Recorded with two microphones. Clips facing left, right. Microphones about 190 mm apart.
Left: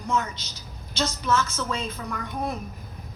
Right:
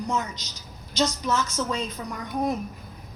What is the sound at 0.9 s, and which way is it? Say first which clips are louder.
Speech: even; 40° right (ahead or behind).